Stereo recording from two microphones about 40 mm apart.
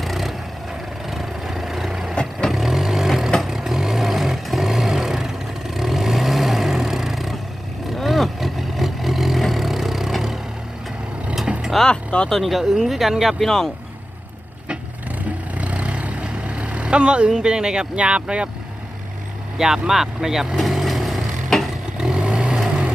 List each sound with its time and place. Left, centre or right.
0.0 s vehicle: centre
11.9 s a sound: left
12.3 s speech: centre
13.4 s speech: centre
15.5 s vehicle: right; by 17.8 s centre
17.9 s speech: right
19.5 s speech: centre
20.8 s vehicle: centre
21.5 s vehicle: centre
22.0 s vehicle: right